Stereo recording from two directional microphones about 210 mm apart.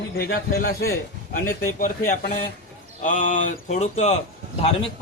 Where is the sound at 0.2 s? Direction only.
50° left (ahead or behind).